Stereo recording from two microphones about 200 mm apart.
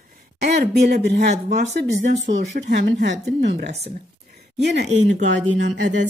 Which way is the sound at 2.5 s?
60° right (ahead or behind).